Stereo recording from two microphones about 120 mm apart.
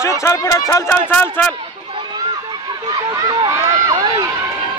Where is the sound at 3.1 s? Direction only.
30° right (ahead or behind).